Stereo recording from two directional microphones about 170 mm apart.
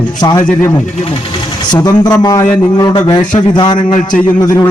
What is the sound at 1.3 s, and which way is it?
A man's voice, 25° left (ahead or behind).